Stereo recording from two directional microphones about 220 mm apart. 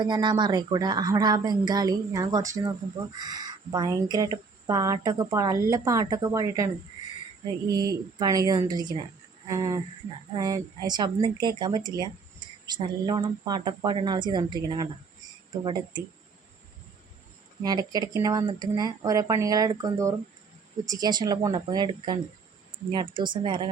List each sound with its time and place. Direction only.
0.0 s speech: 20° right (ahead or behind)
7.7 s speech: 15° right (ahead or behind)
17.6 s speech: 20° right (ahead or behind)